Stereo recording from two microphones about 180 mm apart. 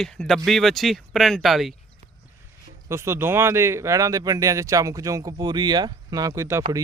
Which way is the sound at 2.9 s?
15° right (ahead or behind).